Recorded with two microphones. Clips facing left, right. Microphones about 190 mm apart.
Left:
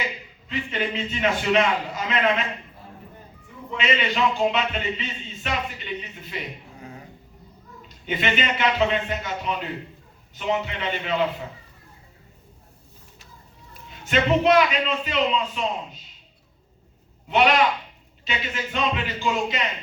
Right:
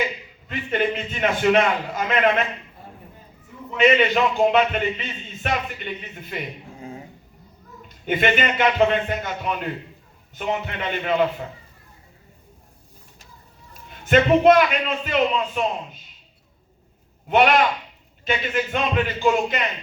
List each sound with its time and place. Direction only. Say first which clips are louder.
0.4 s a man's voice: right 4 dB; 50° right (ahead or behind)
3.8 s a man's voice: right 7 dB; 50° right (ahead or behind)
6.7 s finger snapping: right 4 dB; 25° right (ahead or behind)
8.0 s a man's voice: right 4 dB; 50° right (ahead or behind)
14.1 s a man's voice: right 4 dB; 50° right (ahead or behind)
17.2 s a man's voice: right 2 dB; 50° right (ahead or behind)